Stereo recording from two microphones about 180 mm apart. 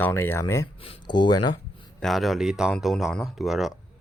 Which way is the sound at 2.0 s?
Centre (ahead or behind).